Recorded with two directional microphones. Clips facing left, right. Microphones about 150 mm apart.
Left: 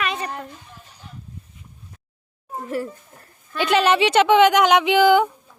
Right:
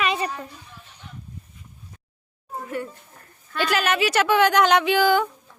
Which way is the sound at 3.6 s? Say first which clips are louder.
Left 5 dB; 25° left (ahead or behind).